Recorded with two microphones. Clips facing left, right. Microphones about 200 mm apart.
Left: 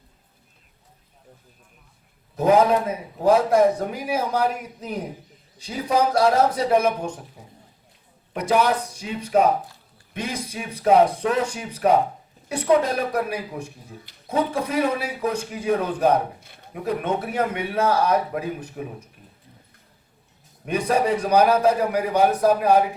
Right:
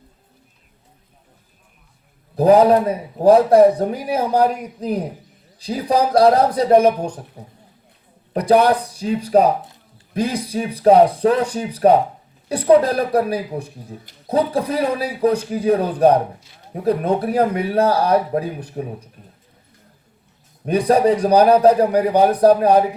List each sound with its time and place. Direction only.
2.3 s speech: 35° right (ahead or behind)
20.7 s speech: 35° right (ahead or behind)